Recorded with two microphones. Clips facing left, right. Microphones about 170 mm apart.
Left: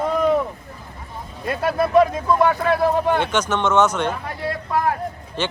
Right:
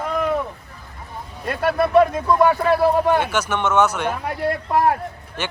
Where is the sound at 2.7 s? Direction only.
10° right (ahead or behind).